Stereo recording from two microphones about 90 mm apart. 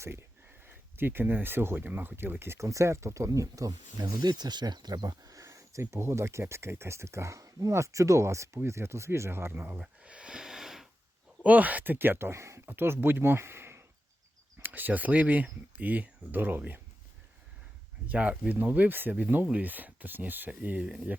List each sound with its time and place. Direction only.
0.0 s speech: 30° right (ahead or behind)
4.2 s speech: 50° right (ahead or behind); by 10.8 s 5° right (ahead or behind)
11.4 s speech: 15° right (ahead or behind)
18.1 s speech: 15° right (ahead or behind)